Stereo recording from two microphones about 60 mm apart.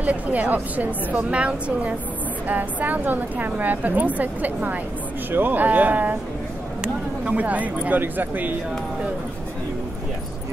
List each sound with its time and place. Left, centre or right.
0.0 s a woman's voice: right